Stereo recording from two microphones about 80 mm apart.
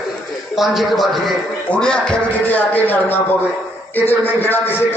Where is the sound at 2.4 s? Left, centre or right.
Left.